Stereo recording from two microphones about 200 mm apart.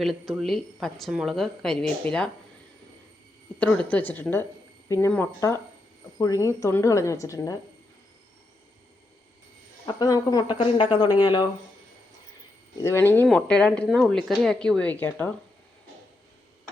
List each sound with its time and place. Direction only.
0.0 s a woman's voice: centre (ahead or behind)
3.6 s speech: 5° left (ahead or behind)
9.8 s speech: 20° left (ahead or behind)
12.8 s a woman's voice: 10° left (ahead or behind)